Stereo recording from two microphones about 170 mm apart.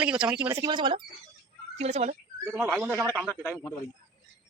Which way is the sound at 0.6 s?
25° right (ahead or behind).